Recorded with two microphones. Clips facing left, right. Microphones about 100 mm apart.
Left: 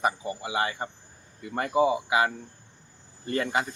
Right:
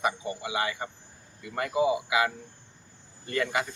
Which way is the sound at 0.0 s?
35° left (ahead or behind).